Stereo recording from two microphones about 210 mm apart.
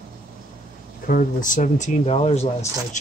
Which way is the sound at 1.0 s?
40° left (ahead or behind).